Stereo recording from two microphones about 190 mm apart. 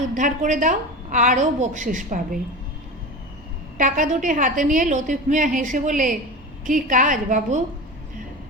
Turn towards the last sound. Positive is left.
turn(degrees=-40)  # may be behind; listen again after turning